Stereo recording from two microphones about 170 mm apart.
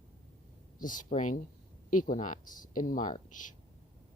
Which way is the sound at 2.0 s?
50° left (ahead or behind).